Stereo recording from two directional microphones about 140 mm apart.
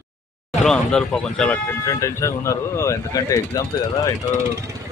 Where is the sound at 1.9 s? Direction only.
20° left (ahead or behind).